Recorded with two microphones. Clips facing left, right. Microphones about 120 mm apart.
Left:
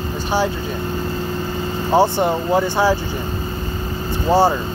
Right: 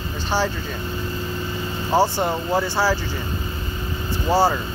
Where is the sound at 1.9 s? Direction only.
15° left (ahead or behind).